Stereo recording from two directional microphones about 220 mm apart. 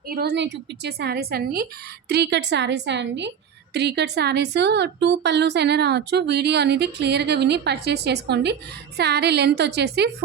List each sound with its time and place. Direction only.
0.1 s a woman's voice: 45° right (ahead or behind)